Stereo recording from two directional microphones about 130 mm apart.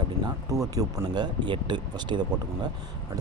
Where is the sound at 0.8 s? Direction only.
30° right (ahead or behind).